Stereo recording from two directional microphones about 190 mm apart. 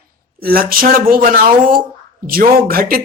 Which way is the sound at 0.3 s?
50° right (ahead or behind).